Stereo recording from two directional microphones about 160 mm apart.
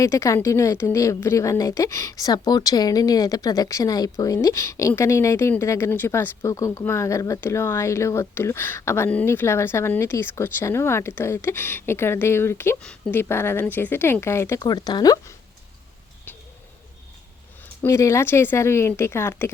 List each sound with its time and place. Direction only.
0.0 s a woman's voice: 20° left (ahead or behind)
17.8 s a woman's voice: 20° left (ahead or behind)